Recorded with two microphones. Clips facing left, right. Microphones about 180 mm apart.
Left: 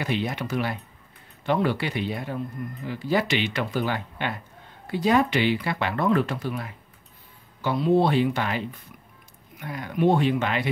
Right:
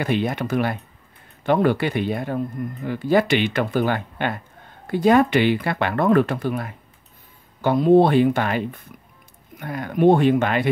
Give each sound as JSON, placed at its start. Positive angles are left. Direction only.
{"t": 0.0, "sound": "speech", "side_deg": -50}